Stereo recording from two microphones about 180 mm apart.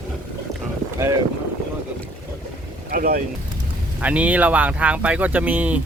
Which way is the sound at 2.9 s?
55° right (ahead or behind).